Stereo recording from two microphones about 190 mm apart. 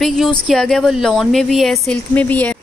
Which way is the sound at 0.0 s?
Centre (ahead or behind).